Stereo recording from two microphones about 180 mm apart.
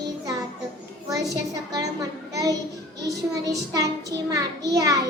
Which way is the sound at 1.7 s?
20° right (ahead or behind).